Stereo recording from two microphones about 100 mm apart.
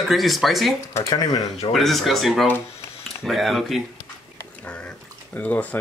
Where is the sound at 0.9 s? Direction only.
40° left (ahead or behind).